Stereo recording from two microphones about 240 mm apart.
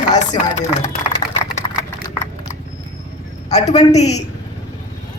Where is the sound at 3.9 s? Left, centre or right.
Left.